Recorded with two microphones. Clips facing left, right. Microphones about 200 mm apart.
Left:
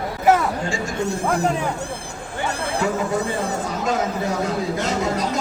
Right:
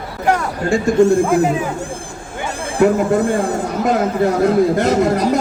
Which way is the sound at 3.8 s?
60° right (ahead or behind).